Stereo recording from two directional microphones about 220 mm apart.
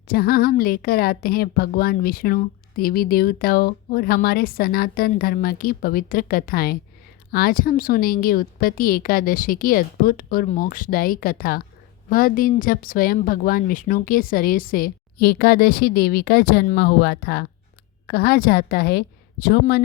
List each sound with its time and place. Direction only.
0.1 s a woman's voice: 45° left (ahead or behind)